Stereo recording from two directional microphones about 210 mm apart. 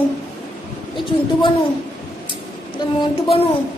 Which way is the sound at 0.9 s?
25° left (ahead or behind).